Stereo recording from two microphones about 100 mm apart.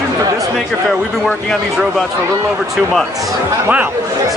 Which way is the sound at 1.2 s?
Centre (ahead or behind).